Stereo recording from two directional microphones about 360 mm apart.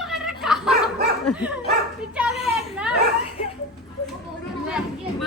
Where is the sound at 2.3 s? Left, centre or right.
Centre.